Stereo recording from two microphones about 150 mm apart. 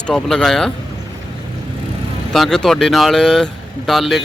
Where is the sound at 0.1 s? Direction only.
5° left (ahead or behind).